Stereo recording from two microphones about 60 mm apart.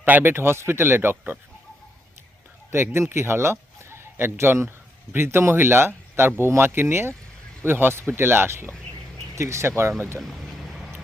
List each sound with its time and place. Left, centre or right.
0.0 s speech: right
2.7 s speech: right
9.3 s speech: right
10.2 s a sound: centre